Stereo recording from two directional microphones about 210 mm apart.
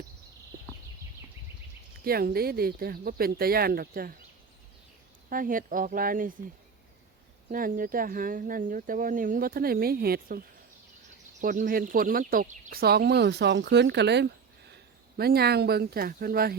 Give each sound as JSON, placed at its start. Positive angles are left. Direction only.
{"t": 2.0, "sound": "speech", "side_deg": -45}
{"t": 5.3, "sound": "speech", "side_deg": -40}
{"t": 7.5, "sound": "speech", "side_deg": -40}